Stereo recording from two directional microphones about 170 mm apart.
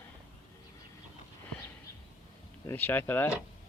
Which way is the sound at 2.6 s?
10° left (ahead or behind).